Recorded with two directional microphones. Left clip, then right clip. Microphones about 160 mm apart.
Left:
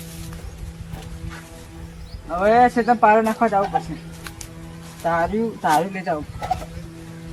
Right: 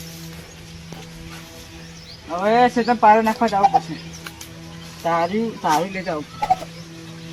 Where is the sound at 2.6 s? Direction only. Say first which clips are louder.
Even; 20° left (ahead or behind).